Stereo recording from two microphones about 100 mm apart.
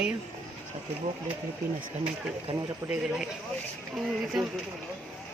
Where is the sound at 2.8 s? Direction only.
30° right (ahead or behind).